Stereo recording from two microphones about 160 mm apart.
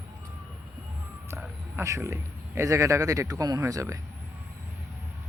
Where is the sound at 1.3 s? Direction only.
15° right (ahead or behind).